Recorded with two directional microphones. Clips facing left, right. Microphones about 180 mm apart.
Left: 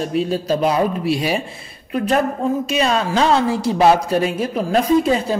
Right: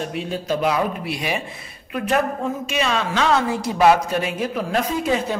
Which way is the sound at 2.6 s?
40° left (ahead or behind).